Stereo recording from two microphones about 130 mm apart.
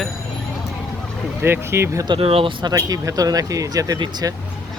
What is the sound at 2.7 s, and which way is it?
Speech, 25° right (ahead or behind).